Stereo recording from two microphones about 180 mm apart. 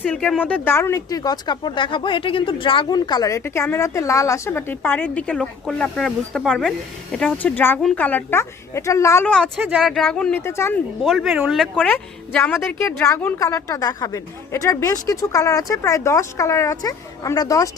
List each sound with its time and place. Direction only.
0.0 s speech: 5° left (ahead or behind)
11.0 s speech: centre (ahead or behind); by 17.7 s 20° left (ahead or behind)